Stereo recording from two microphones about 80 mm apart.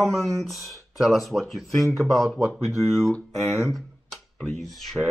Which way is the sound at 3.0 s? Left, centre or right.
Centre.